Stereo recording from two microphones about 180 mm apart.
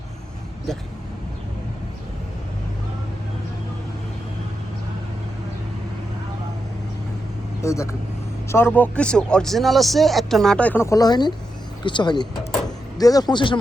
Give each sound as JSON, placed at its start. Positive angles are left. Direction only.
{"t": 7.6, "sound": "a man's voice", "side_deg": 15}